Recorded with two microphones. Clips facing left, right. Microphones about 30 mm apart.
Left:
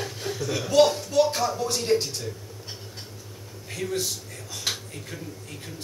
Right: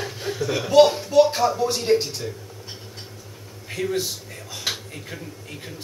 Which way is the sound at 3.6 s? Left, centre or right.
Centre.